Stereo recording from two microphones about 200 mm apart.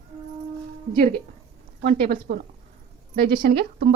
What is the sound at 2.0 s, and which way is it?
Speech, 50° right (ahead or behind).